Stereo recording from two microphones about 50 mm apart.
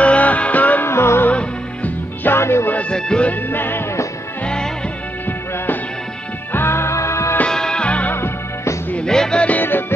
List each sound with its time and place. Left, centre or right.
0.0 s music: left
0.8 s music: left
1.3 s music: left
2.3 s music: left
2.9 s music: centre
3.4 s music: left
6.5 s music: left
7.4 s music: centre
9.0 s music: centre
9.6 s music: left